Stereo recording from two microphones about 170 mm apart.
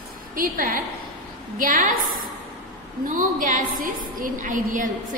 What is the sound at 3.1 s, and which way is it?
A woman's voice, 50° right (ahead or behind).